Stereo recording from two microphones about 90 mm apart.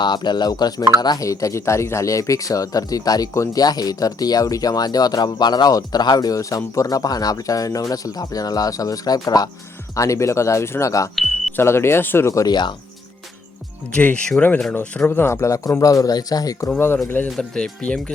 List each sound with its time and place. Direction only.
0.0 s speech: 55° left (ahead or behind); by 12.5 s 35° left (ahead or behind)
12.5 s speech: 55° left (ahead or behind)
13.9 s speech: 15° left (ahead or behind); by 16.6 s 40° left (ahead or behind)
16.6 s speech: 25° left (ahead or behind)
17.3 s speech: 10° left (ahead or behind)